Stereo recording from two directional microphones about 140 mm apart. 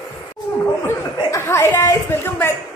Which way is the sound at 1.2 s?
20° left (ahead or behind).